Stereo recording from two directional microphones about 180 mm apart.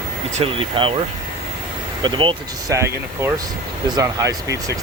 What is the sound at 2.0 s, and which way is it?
Speech, 25° right (ahead or behind).